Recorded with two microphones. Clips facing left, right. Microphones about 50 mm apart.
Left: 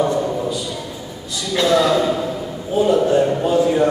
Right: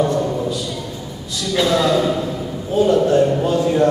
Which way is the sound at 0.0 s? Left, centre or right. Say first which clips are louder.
Even; centre.